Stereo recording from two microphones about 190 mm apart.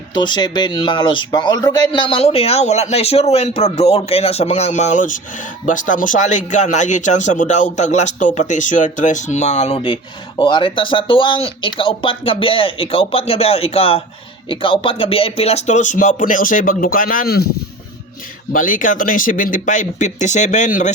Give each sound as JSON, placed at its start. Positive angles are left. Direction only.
{"t": 0.1, "sound": "speech", "side_deg": 25}
{"t": 18.5, "sound": "speech", "side_deg": 45}